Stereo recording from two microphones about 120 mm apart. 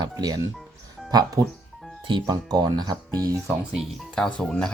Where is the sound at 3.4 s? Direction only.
5° right (ahead or behind).